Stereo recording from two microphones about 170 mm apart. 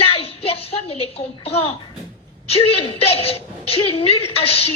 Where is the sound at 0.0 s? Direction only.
35° left (ahead or behind).